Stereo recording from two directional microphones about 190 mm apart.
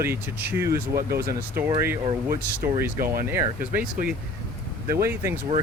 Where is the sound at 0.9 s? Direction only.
55° right (ahead or behind).